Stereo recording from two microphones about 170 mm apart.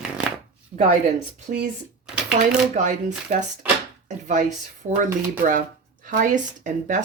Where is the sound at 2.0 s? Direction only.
5° right (ahead or behind).